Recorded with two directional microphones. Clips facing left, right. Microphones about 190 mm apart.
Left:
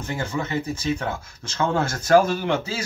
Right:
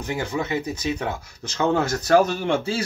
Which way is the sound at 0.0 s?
15° right (ahead or behind).